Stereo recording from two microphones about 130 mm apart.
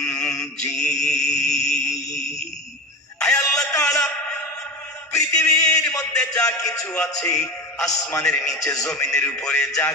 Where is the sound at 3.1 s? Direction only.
5° left (ahead or behind).